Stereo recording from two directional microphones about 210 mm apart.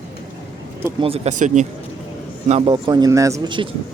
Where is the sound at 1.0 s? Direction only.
30° right (ahead or behind).